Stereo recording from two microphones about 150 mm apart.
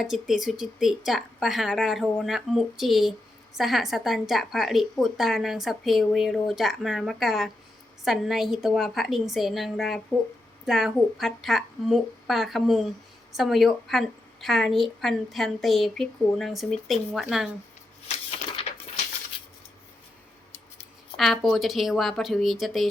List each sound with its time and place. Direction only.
0.0 s a woman's voice: centre (ahead or behind)
18.1 s a sound: 45° left (ahead or behind)
21.2 s a woman's voice: centre (ahead or behind)